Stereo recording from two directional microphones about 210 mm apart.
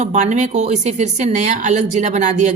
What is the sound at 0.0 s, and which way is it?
A woman's voice, 35° right (ahead or behind).